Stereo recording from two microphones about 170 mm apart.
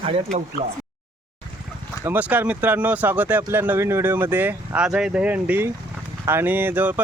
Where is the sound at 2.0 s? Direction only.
10° right (ahead or behind).